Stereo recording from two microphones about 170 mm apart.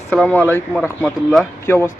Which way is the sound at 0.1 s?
10° left (ahead or behind).